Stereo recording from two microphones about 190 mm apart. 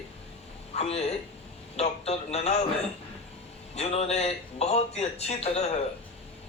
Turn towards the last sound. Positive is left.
turn(degrees=35)  # may be behind; listen again after turning